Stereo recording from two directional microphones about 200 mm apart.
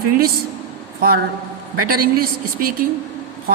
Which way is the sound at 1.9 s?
45° right (ahead or behind).